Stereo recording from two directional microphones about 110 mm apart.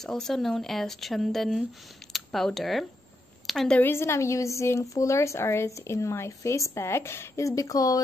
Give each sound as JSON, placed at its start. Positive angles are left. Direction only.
{"t": 0.0, "sound": "a woman's voice", "side_deg": 5}
{"t": 3.8, "sound": "a woman's voice", "side_deg": 25}